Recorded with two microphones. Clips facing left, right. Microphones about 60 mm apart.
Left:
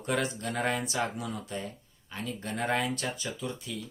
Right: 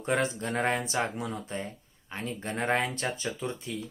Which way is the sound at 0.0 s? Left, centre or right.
Right.